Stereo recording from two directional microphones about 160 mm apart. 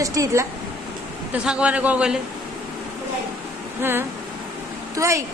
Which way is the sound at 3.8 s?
15° right (ahead or behind).